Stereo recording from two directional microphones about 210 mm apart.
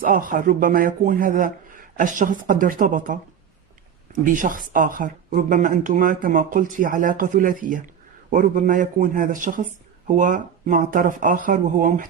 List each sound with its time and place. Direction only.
0.0 s speech: 40° right (ahead or behind)